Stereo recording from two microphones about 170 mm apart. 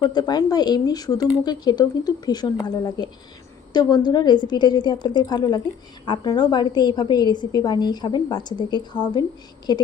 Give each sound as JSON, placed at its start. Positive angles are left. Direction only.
{"t": 0.0, "sound": "a woman's voice", "side_deg": 25}